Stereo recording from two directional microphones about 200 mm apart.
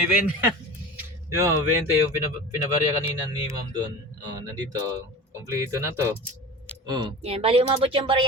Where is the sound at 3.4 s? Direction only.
20° right (ahead or behind).